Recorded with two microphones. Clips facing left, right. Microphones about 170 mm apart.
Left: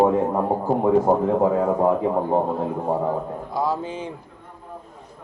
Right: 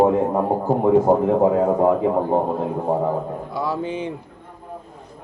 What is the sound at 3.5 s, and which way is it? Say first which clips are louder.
Speech: left 1 dB; 65° right (ahead or behind).